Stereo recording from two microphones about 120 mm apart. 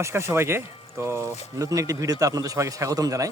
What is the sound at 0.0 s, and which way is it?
A man's voice, 25° right (ahead or behind).